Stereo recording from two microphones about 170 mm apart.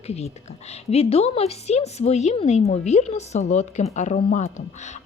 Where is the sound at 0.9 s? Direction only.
35° left (ahead or behind).